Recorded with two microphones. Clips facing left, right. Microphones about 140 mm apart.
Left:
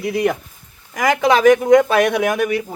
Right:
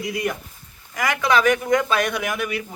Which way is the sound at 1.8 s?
65° left (ahead or behind).